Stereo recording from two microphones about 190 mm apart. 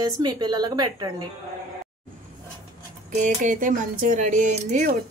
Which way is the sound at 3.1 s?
40° right (ahead or behind).